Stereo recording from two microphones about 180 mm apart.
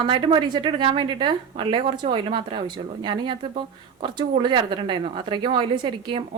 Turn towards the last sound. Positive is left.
turn(degrees=-25)  # may be behind; listen again after turning